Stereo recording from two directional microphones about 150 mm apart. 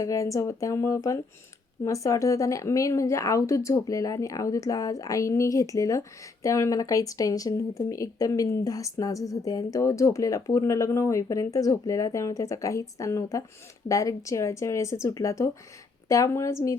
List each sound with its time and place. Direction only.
0.0 s speech: 20° left (ahead or behind)